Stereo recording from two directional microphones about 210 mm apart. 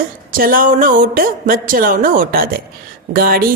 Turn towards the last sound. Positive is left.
turn(degrees=-45)  # may be behind; listen again after turning